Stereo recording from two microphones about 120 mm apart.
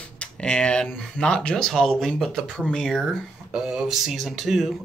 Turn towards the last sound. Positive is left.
turn(degrees=0)  # may be behind; listen again after turning